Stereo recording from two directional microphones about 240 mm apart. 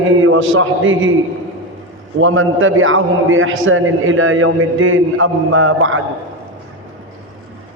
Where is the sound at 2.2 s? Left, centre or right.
Right.